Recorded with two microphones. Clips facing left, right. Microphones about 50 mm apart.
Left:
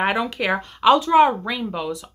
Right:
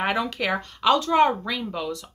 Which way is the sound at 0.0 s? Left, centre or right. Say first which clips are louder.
Left 3 dB; centre.